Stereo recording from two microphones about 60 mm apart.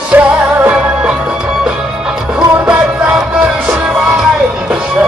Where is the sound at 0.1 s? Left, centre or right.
Right.